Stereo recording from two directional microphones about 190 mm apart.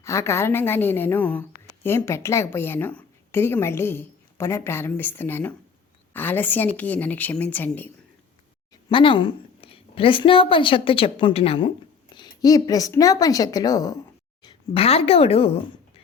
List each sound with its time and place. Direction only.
0.0 s a woman's voice: 15° left (ahead or behind)
8.7 s a woman's voice: 25° left (ahead or behind)
14.4 s a woman's voice: 30° left (ahead or behind)